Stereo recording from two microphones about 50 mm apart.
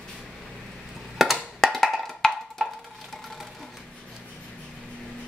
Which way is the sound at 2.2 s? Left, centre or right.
Centre.